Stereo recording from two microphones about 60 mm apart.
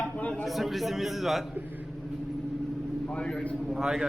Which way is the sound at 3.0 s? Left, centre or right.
Centre.